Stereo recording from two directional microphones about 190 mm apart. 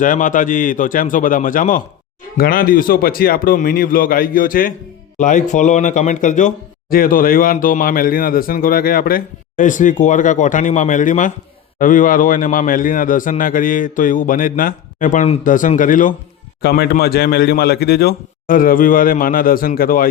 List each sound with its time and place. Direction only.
0.0 s a man's voice: 45° left (ahead or behind)
16.6 s a man's voice: 55° left (ahead or behind)